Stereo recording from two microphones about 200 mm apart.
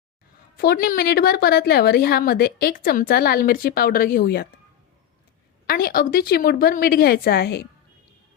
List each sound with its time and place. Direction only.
0.5 s a woman's voice: 50° left (ahead or behind)
5.6 s a woman's voice: 45° left (ahead or behind)